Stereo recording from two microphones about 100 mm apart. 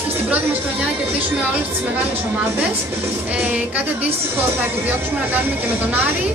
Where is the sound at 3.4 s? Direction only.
15° right (ahead or behind).